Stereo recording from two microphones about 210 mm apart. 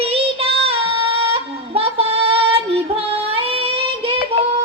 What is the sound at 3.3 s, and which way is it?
Child singing, 25° right (ahead or behind).